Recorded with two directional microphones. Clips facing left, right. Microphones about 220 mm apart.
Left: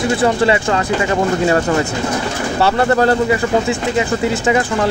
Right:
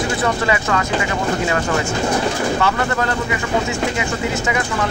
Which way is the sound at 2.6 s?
35° left (ahead or behind).